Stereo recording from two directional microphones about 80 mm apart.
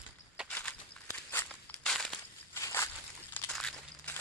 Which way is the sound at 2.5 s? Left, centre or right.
Left.